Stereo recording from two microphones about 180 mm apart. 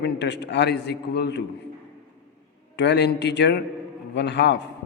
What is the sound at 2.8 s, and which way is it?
A man's voice, 70° left (ahead or behind).